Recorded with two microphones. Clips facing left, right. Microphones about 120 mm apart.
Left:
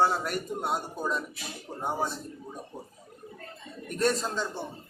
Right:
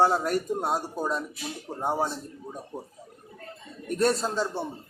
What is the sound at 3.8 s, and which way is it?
Speech, 35° right (ahead or behind).